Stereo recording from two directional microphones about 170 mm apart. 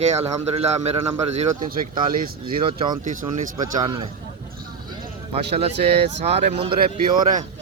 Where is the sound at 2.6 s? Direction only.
30° right (ahead or behind).